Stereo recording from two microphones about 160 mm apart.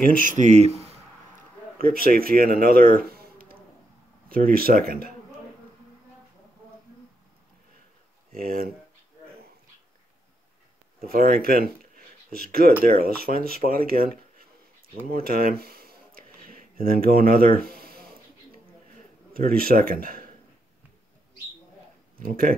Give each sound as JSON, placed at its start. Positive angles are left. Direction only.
{"t": 0.0, "sound": "speech", "side_deg": -55}
{"t": 1.8, "sound": "speech", "side_deg": -65}
{"t": 8.4, "sound": "speech", "side_deg": -65}
{"t": 11.0, "sound": "speech", "side_deg": -65}
{"t": 15.0, "sound": "a sound", "side_deg": -65}
{"t": 19.3, "sound": "speech", "side_deg": -70}
{"t": 22.2, "sound": "speech", "side_deg": -60}